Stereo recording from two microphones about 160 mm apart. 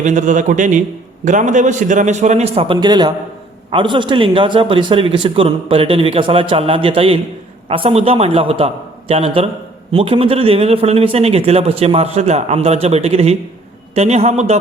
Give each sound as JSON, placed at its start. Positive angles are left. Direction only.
{"t": 0.0, "sound": "a man's voice", "side_deg": -50}